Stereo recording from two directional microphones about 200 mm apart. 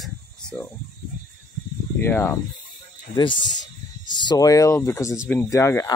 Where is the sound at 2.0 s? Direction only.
10° left (ahead or behind).